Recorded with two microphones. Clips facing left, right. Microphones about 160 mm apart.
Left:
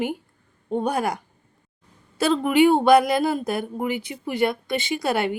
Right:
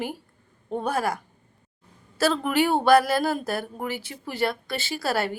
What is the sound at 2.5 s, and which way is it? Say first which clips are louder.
Speech: left 5 dB; 15° left (ahead or behind).